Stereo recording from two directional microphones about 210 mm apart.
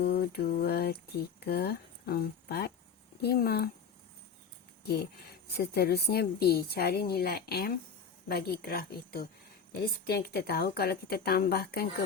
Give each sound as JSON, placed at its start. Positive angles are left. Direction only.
{"t": 0.0, "sound": "a sound", "side_deg": 50}
{"t": 3.2, "sound": "a woman's voice", "side_deg": 50}
{"t": 5.5, "sound": "a woman's voice", "side_deg": 50}